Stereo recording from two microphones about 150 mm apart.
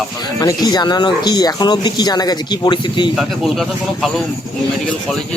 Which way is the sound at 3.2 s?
Centre (ahead or behind).